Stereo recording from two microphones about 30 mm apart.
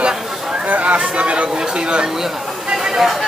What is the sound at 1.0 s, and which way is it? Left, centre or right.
Speech, right.